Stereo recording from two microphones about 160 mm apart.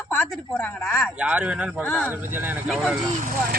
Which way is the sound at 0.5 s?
10° left (ahead or behind).